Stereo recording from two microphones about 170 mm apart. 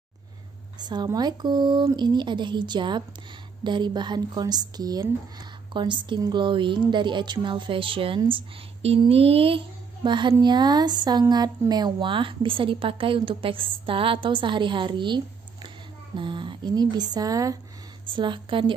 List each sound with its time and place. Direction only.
0.7 s speech: 25° right (ahead or behind)